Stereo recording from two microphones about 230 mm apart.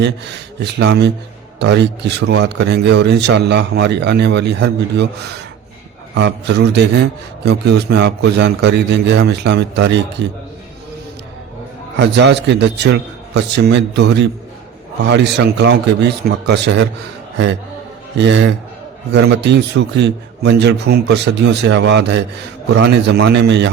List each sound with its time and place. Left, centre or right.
0.0 s a man's voice: right
6.1 s a man's voice: right
11.9 s a man's voice: right
18.2 s a man's voice: right